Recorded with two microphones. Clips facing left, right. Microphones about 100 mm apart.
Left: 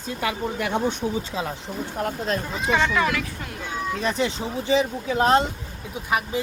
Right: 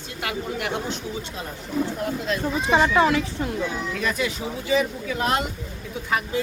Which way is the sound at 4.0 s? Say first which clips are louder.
Left 2 dB; 30° left (ahead or behind).